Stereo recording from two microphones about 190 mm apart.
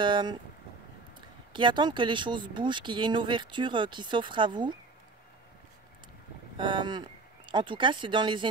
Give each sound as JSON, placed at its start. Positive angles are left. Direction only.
{"t": 0.0, "sound": "speech", "side_deg": -25}
{"t": 1.5, "sound": "speech", "side_deg": -25}
{"t": 6.5, "sound": "speech", "side_deg": -25}